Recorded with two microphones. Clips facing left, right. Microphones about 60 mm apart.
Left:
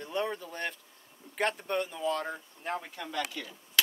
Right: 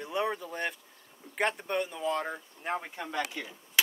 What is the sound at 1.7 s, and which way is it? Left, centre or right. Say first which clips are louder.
Speech: even; centre.